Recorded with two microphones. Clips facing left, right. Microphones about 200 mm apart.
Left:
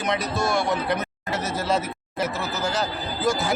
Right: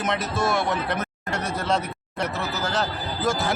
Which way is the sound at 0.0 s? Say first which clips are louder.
Even; centre (ahead or behind).